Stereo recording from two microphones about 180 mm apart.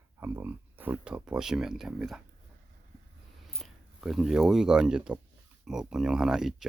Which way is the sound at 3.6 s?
Centre (ahead or behind).